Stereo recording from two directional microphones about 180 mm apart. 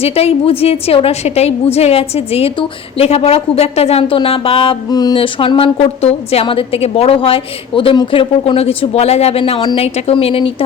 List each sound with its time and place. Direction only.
0.0 s a woman's voice: 35° left (ahead or behind)